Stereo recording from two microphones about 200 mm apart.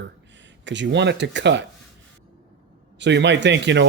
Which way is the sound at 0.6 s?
65° right (ahead or behind).